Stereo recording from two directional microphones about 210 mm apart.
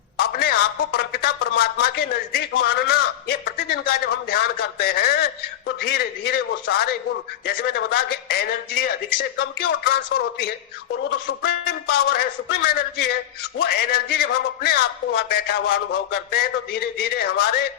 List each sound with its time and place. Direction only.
0.2 s a man's voice: 50° left (ahead or behind)